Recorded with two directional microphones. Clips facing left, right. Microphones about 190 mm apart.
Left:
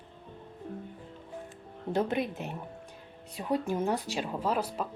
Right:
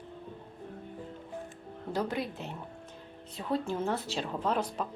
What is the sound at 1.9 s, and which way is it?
A woman's voice, 20° left (ahead or behind).